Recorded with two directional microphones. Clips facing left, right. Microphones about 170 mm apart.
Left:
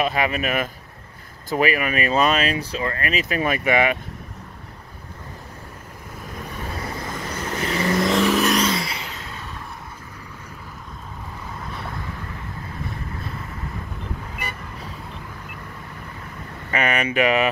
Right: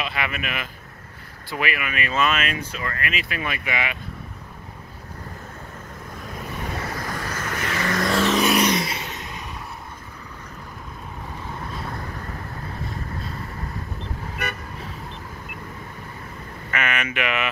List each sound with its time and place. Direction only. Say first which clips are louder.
0.0 s speech: left 7 dB; 40° left (ahead or behind)
7.1 s vehicle: left 1 dB; 20° left (ahead or behind)
8.5 s vehicle: right 1 dB; 20° right (ahead or behind)
16.7 s a sound: left 5 dB; 35° left (ahead or behind)